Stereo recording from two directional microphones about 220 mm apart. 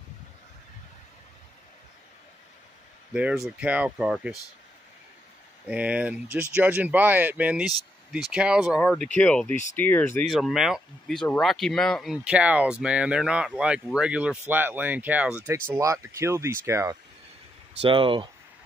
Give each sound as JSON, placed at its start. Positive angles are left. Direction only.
{"t": 3.1, "sound": "speech", "side_deg": -5}
{"t": 5.7, "sound": "speech", "side_deg": -5}
{"t": 17.7, "sound": "speech", "side_deg": -25}